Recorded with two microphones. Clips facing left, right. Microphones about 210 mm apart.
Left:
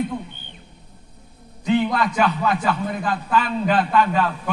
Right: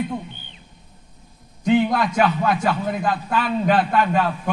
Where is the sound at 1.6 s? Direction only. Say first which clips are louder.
Right 2 dB; 50° right (ahead or behind).